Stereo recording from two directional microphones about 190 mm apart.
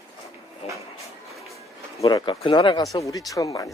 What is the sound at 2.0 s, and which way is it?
Speech, 25° left (ahead or behind).